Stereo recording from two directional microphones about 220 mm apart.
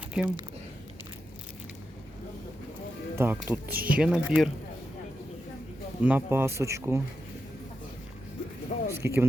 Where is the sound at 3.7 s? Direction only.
40° right (ahead or behind).